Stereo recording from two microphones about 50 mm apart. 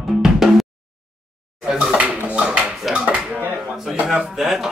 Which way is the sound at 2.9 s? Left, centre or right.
Right.